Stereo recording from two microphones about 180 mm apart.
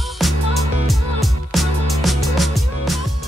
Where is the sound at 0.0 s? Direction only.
Centre (ahead or behind).